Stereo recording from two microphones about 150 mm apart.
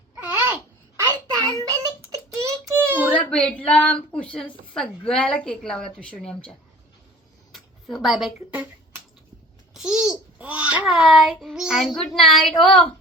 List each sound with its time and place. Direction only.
0.2 s babbling: 15° right (ahead or behind)
1.0 s child singing: 25° right (ahead or behind)
3.1 s speech: 5° left (ahead or behind)
7.5 s speech: centre (ahead or behind)
9.7 s a child's voice: 5° right (ahead or behind)